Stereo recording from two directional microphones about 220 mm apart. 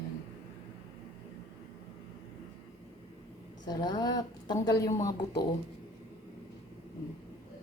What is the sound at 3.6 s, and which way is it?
A woman's voice, 20° left (ahead or behind).